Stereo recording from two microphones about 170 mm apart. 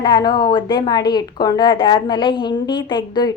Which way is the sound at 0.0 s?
25° left (ahead or behind).